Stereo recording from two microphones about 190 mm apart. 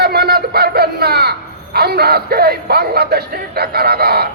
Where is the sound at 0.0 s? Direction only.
55° right (ahead or behind).